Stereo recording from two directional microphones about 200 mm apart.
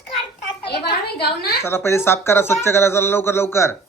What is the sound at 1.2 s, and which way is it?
Speech, 55° left (ahead or behind).